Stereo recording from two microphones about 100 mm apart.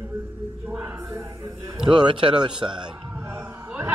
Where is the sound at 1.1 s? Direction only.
30° right (ahead or behind).